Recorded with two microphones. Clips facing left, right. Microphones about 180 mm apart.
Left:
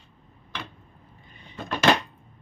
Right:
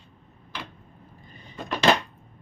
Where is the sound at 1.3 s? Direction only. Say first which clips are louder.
Right 2 dB; 40° right (ahead or behind).